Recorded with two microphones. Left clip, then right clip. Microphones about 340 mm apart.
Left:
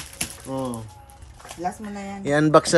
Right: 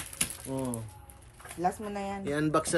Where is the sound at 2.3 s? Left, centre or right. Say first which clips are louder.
Left 13 dB; left.